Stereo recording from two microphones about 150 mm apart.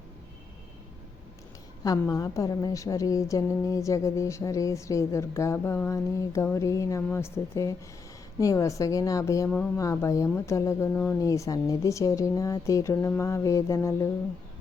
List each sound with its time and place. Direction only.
1.8 s a woman's voice: 25° left (ahead or behind)